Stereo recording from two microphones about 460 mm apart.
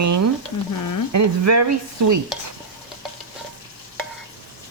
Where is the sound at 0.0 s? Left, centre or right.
Right.